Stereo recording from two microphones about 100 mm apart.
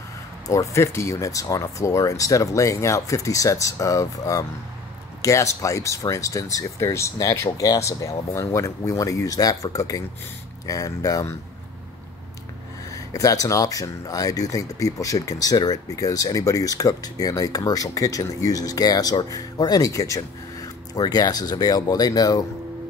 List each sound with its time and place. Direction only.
0.5 s speech: 30° left (ahead or behind)
12.9 s speech: 35° left (ahead or behind)